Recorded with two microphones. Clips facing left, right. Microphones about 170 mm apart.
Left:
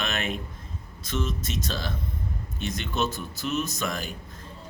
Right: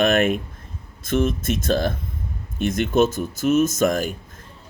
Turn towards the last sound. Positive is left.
turn(degrees=-45)  # may be behind; listen again after turning